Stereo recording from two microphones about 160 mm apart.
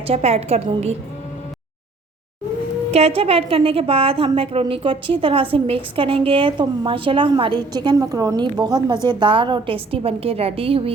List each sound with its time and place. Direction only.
0.1 s a woman's voice: 40° right (ahead or behind)
2.9 s a woman's voice: 40° right (ahead or behind)